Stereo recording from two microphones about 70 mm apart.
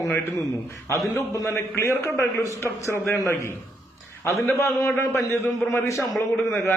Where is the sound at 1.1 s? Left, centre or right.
Left.